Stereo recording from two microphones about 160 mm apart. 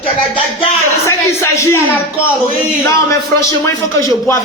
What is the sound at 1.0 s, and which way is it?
A man's voice, 20° left (ahead or behind).